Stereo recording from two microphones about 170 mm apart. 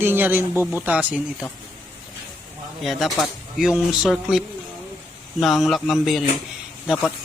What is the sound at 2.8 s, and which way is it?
Speech, centre (ahead or behind).